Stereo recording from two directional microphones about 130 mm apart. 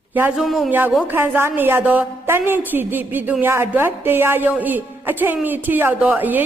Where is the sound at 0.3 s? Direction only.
Centre (ahead or behind).